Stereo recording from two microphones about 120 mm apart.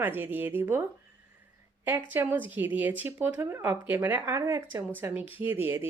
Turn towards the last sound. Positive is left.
turn(degrees=-15)  # may be behind; listen again after turning